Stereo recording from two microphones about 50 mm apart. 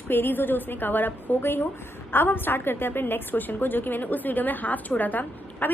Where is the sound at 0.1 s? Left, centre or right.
Left.